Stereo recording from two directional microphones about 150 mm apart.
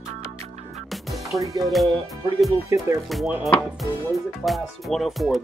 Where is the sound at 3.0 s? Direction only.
Centre (ahead or behind).